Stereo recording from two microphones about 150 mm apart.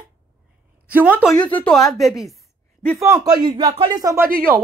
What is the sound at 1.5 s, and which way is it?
Speech, 5° left (ahead or behind).